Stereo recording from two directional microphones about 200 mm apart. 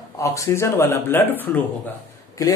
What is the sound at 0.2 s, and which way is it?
Speech, 15° left (ahead or behind).